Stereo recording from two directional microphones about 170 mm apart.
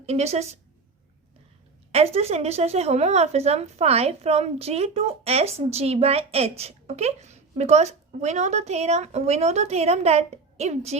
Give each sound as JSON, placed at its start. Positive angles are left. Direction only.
{"t": 0.0, "sound": "a woman's voice", "side_deg": -40}
{"t": 1.9, "sound": "a woman's voice", "side_deg": -35}